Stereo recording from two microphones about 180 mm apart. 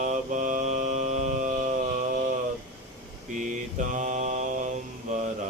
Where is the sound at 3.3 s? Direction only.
45° right (ahead or behind).